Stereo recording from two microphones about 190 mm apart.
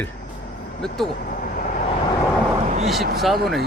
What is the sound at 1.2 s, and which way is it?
Vehicle, 50° left (ahead or behind).